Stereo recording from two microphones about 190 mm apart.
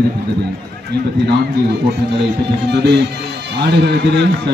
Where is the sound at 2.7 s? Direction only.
60° right (ahead or behind).